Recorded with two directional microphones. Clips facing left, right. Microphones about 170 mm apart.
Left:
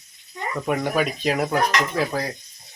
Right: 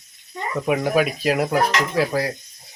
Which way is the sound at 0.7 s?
5° right (ahead or behind).